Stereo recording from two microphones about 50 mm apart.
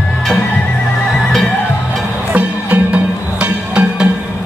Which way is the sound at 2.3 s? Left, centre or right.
Right.